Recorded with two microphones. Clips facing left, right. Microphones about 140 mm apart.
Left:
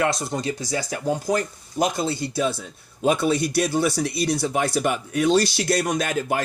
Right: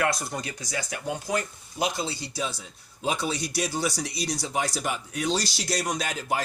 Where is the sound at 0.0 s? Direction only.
25° left (ahead or behind).